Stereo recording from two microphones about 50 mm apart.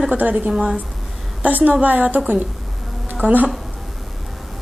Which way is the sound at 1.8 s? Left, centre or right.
Right.